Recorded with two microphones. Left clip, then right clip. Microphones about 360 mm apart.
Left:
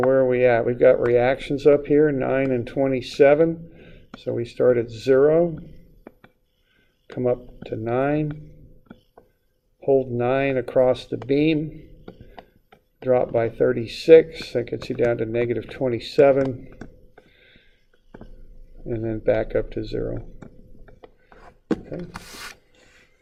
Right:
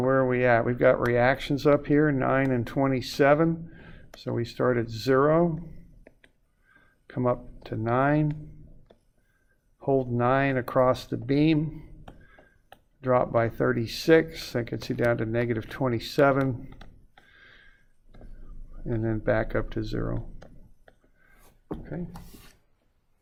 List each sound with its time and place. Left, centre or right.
0.1 s speech: right
7.9 s speech: right
9.8 s speech: right
13.1 s speech: right
18.9 s speech: right